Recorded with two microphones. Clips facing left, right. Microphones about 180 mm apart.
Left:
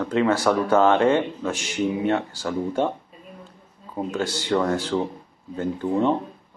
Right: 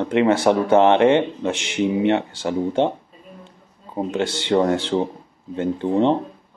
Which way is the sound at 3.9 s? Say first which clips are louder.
Right 3 dB; 25° right (ahead or behind).